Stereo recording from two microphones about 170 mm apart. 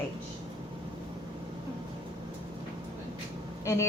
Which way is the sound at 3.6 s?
15° left (ahead or behind).